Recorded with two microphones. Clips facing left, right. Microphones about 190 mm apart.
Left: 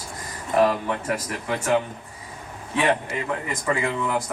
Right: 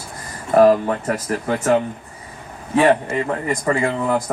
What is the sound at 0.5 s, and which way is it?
Speech, 40° right (ahead or behind).